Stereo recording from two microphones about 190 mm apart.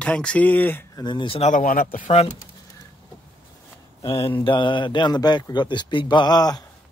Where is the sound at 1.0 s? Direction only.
25° left (ahead or behind).